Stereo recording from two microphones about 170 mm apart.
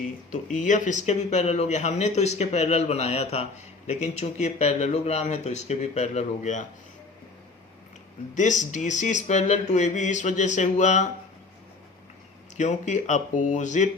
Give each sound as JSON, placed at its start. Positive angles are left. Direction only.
{"t": 0.5, "sound": "speech", "side_deg": 45}
{"t": 8.4, "sound": "speech", "side_deg": 45}
{"t": 12.5, "sound": "speech", "side_deg": 45}